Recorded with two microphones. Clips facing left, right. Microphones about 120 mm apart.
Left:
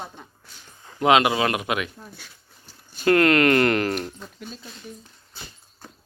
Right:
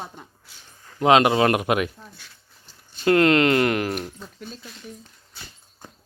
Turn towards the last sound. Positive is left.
turn(degrees=0)  # may be behind; listen again after turning